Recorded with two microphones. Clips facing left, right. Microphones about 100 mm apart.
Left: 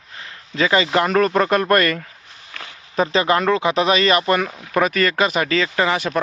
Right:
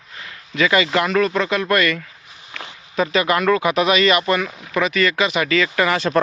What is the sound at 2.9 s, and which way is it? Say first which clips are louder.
Speech: left 1 dB; 30° left (ahead or behind).